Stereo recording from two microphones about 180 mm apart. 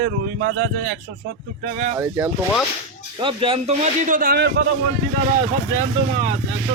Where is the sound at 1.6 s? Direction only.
50° right (ahead or behind).